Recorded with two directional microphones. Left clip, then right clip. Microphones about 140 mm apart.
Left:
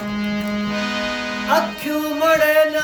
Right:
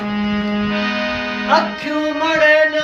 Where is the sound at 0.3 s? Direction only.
30° left (ahead or behind).